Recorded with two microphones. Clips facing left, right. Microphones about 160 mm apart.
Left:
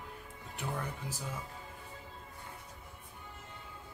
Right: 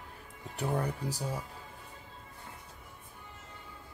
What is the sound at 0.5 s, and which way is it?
Speech, 35° right (ahead or behind).